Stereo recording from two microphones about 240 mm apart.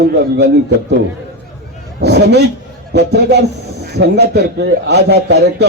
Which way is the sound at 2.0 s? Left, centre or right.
Right.